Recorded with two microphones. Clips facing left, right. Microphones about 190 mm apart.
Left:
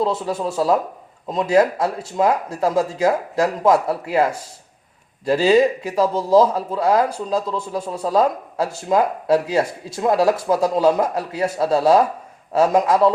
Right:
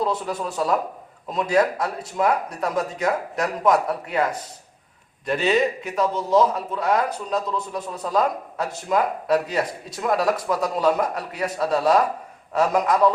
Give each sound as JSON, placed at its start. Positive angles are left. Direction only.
{"t": 0.0, "sound": "speech", "side_deg": 25}